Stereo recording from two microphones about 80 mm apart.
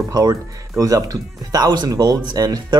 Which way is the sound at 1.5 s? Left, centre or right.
Right.